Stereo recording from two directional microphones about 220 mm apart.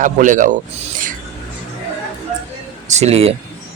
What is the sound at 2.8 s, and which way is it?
Speech, 30° right (ahead or behind).